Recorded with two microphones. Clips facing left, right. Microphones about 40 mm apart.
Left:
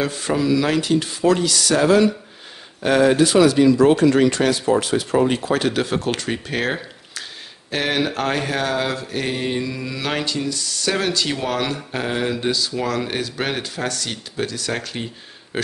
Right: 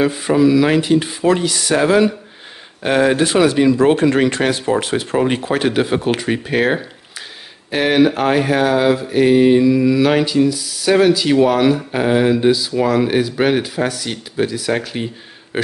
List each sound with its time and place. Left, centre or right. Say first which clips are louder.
0.0 s speech: right 7 dB; centre; by 4.6 s right
4.7 s mantra: right 1 dB; right; by 15.0 s centre
15.5 s speech: right 4 dB; centre